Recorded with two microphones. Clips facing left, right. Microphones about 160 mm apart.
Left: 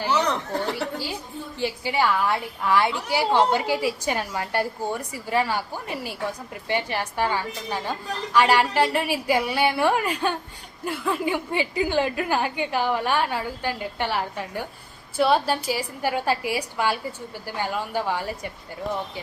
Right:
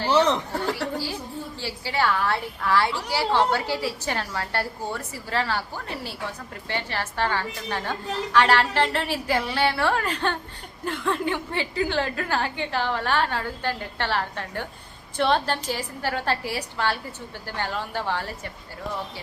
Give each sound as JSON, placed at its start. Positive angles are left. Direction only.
{"t": 1.5, "sound": "a woman's voice", "side_deg": 15}